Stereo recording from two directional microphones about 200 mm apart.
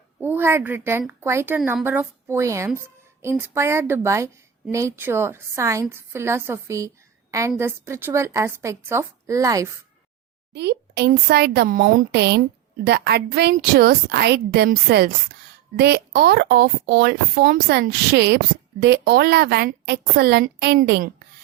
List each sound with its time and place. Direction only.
0.2 s a woman's voice: 10° right (ahead or behind)
10.5 s a woman's voice: 55° right (ahead or behind)